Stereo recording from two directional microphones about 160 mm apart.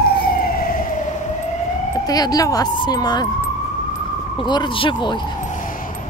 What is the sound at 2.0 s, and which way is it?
Speech, 25° left (ahead or behind).